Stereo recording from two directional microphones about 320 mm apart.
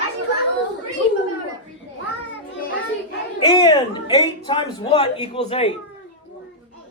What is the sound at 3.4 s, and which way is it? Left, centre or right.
Speech, centre.